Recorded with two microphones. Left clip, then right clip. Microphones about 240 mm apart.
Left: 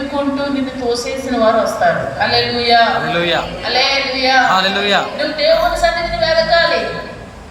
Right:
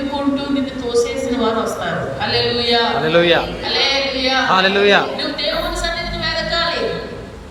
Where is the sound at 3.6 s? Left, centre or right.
Centre.